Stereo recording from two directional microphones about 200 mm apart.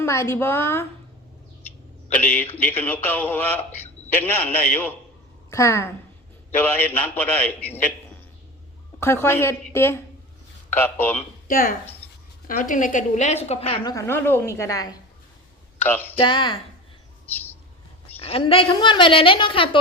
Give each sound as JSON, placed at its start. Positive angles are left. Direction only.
{"t": 0.0, "sound": "speech", "side_deg": 15}
{"t": 2.2, "sound": "a woman's voice", "side_deg": 10}
{"t": 9.0, "sound": "speech", "side_deg": 10}
{"t": 11.4, "sound": "a woman's voice", "side_deg": 45}
{"t": 13.9, "sound": "speech", "side_deg": 10}
{"t": 16.1, "sound": "a woman's voice", "side_deg": 25}
{"t": 17.2, "sound": "bird", "side_deg": 10}
{"t": 18.2, "sound": "a woman's voice", "side_deg": 30}